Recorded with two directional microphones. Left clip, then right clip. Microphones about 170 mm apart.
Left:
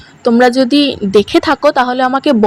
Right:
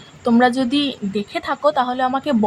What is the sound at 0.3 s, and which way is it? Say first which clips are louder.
Speech: left 7 dB; 25° left (ahead or behind).